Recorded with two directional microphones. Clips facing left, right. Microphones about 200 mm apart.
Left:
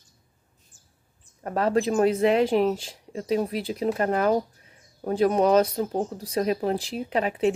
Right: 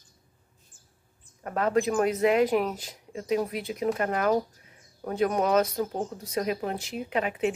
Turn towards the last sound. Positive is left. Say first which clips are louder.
# left 4 dB
turn(degrees=35)  # may be behind; listen again after turning